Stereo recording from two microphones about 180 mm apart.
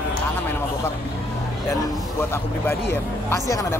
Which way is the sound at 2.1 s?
15° left (ahead or behind).